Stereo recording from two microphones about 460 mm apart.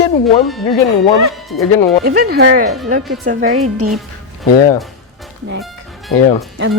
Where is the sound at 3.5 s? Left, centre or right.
Right.